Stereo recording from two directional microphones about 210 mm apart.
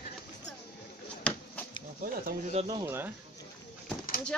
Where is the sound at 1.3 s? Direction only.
5° left (ahead or behind).